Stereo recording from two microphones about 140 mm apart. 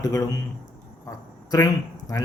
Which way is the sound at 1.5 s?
25° left (ahead or behind).